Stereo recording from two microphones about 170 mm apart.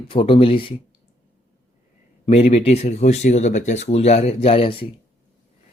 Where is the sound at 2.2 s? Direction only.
35° left (ahead or behind).